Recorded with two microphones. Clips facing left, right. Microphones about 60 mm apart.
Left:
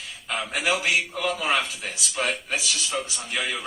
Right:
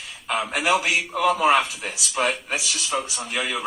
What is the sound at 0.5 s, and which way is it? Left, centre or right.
A man's voice, right.